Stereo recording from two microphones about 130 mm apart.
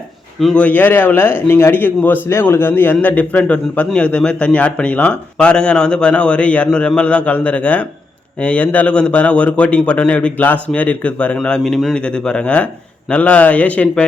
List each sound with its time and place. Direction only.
0.3 s a man's voice: 5° left (ahead or behind)